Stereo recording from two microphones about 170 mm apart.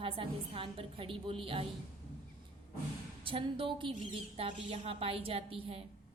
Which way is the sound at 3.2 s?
30° right (ahead or behind).